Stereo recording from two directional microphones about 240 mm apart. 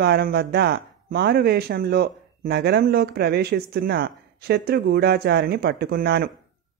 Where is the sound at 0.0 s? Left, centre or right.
Right.